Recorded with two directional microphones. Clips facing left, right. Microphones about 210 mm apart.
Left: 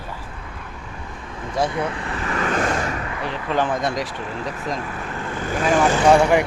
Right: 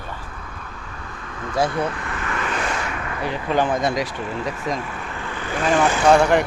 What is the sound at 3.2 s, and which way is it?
Speech, 5° right (ahead or behind).